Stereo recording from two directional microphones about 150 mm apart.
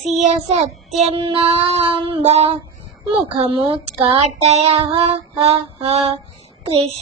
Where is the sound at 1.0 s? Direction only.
40° right (ahead or behind).